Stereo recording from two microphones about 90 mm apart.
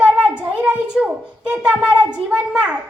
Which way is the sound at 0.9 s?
10° right (ahead or behind).